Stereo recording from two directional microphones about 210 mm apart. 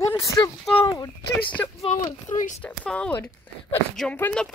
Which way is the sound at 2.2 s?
35° left (ahead or behind).